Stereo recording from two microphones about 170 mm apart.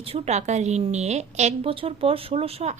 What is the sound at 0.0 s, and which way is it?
A woman's voice, 35° right (ahead or behind).